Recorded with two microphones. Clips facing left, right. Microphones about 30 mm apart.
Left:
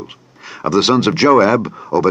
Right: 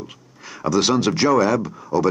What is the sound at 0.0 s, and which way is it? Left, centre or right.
Speech, centre.